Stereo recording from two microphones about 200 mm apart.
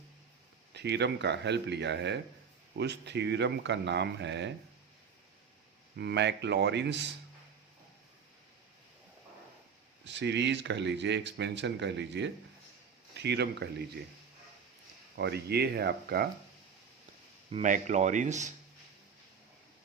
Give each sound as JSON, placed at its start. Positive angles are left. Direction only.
{"t": 0.7, "sound": "speech", "side_deg": -55}
{"t": 6.0, "sound": "speech", "side_deg": -60}
{"t": 10.0, "sound": "speech", "side_deg": -60}
{"t": 15.1, "sound": "speech", "side_deg": -55}
{"t": 17.5, "sound": "speech", "side_deg": -40}